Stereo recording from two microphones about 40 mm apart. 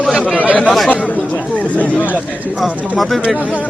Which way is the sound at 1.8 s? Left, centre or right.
Left.